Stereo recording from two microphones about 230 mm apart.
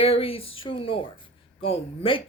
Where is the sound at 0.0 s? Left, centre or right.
Left.